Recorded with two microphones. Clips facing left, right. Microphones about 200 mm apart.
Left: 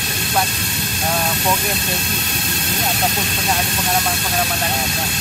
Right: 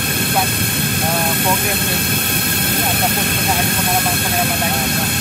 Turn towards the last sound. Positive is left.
turn(degrees=-55)  # may be behind; listen again after turning